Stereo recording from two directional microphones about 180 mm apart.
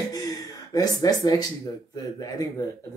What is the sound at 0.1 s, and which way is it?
Gasp, 20° left (ahead or behind).